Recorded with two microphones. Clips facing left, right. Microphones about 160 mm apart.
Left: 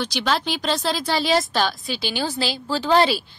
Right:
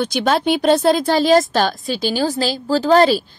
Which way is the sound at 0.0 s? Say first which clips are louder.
Right 6 dB; 50° right (ahead or behind).